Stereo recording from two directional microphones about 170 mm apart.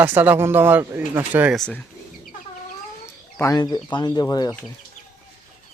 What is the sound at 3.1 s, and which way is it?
Speech, 15° left (ahead or behind).